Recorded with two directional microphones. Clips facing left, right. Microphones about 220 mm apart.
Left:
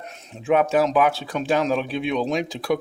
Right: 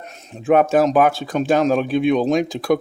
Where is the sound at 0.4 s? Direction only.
45° right (ahead or behind).